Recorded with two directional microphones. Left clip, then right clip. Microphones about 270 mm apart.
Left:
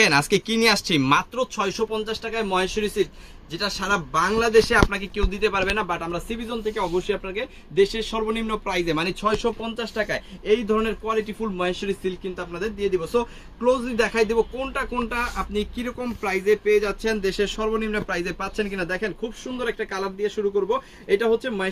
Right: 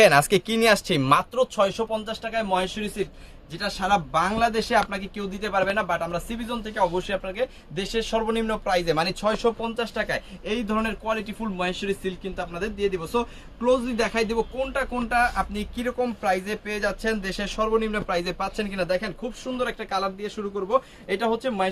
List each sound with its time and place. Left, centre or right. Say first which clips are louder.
0.0 s speech: right 2 dB; right; by 21.7 s centre